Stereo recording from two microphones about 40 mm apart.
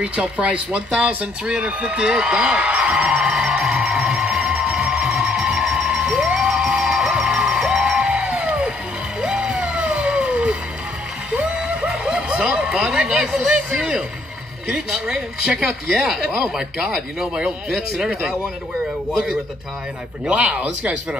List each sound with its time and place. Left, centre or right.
0.0 s speech: right
1.4 s a sound: right
6.4 s music: right
9.2 s a sound: centre
12.0 s snicker: right
12.7 s speech: right
14.9 s speech: right
17.9 s speech: centre
20.2 s speech: right